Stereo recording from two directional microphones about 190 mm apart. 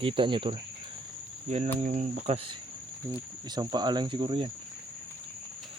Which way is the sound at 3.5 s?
20° right (ahead or behind).